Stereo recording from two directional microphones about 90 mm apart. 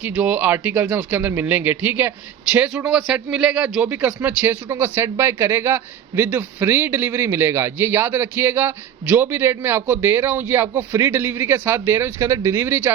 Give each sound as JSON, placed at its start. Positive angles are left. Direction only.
{"t": 0.0, "sound": "speech", "side_deg": -15}